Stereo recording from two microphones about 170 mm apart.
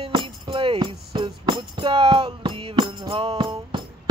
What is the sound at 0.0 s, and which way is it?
Music, 30° right (ahead or behind).